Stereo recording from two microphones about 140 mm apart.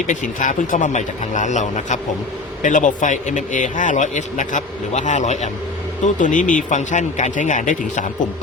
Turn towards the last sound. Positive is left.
turn(degrees=65)  # may be behind; listen again after turning